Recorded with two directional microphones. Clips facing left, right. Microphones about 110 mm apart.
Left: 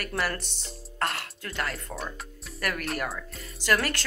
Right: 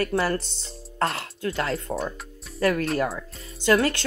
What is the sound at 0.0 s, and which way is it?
Speech, 30° right (ahead or behind).